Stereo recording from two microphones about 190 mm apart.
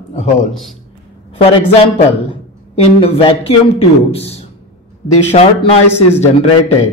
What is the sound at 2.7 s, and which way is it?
A man's voice, 30° left (ahead or behind).